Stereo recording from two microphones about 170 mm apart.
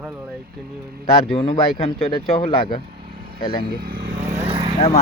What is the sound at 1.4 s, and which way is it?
Speech, 30° left (ahead or behind).